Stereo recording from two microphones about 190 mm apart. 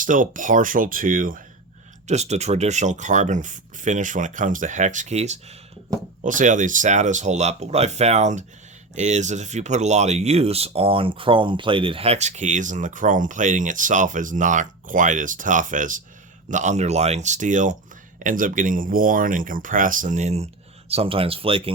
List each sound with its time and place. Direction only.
0.0 s speech: 45° right (ahead or behind)
2.0 s speech: 35° right (ahead or behind)